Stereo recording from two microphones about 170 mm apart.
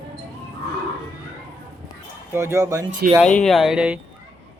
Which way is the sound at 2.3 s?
15° right (ahead or behind).